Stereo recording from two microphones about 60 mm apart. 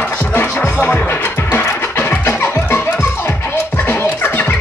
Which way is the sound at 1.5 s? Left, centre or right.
Left.